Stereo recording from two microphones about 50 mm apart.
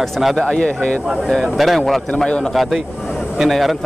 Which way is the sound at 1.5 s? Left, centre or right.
Centre.